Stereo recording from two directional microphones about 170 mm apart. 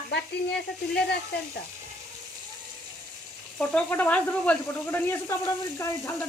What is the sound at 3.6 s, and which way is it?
Speech, 10° left (ahead or behind).